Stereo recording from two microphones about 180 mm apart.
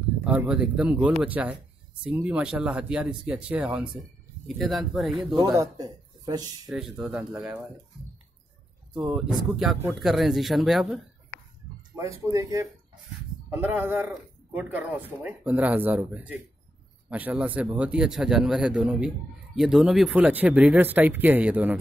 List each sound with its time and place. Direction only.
0.2 s speech: 5° right (ahead or behind)
5.3 s speech: 20° right (ahead or behind)
6.7 s speech: 5° right (ahead or behind)
8.9 s speech: 5° right (ahead or behind)
12.2 s speech: 15° right (ahead or behind)